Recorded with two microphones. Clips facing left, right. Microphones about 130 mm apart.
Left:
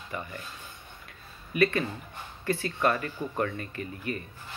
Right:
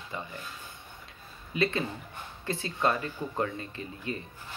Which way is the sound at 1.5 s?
25° right (ahead or behind).